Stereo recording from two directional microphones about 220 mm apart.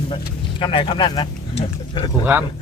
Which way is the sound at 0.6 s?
25° left (ahead or behind).